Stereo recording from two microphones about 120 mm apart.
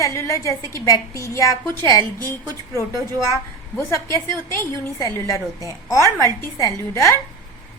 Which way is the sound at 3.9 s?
25° left (ahead or behind).